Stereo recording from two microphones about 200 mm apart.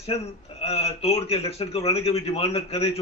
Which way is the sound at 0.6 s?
30° left (ahead or behind).